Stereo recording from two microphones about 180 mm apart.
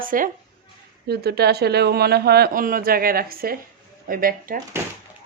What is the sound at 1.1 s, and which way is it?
A woman's voice, 60° right (ahead or behind).